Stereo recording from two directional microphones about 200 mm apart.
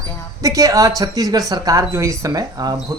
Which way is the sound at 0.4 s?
15° right (ahead or behind).